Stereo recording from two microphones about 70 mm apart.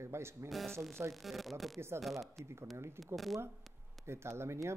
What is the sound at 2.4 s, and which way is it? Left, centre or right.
Speech, right.